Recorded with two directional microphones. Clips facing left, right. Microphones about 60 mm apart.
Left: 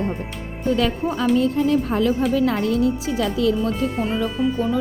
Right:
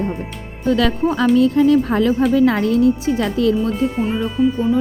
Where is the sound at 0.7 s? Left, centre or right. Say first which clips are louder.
Right 4 dB; right.